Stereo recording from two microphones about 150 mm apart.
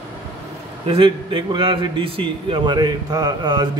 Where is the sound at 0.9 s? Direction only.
35° right (ahead or behind).